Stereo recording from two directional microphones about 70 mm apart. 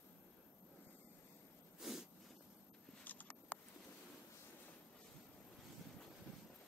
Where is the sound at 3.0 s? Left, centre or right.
Left.